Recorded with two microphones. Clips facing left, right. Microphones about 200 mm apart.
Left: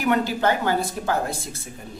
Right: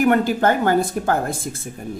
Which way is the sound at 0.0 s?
50° right (ahead or behind).